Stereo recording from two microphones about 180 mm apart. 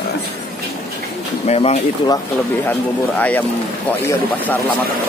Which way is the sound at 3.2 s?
10° left (ahead or behind).